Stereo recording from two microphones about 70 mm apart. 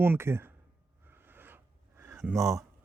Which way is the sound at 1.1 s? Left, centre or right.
Right.